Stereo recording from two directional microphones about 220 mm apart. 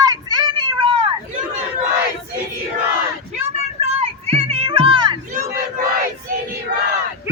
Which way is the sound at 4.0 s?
25° right (ahead or behind).